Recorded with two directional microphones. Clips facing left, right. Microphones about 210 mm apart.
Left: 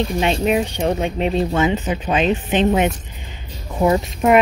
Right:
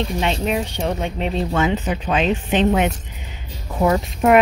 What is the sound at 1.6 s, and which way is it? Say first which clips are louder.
Speech: left 1 dB; 5° left (ahead or behind).